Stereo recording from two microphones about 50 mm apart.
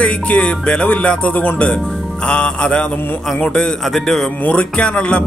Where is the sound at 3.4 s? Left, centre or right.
Centre.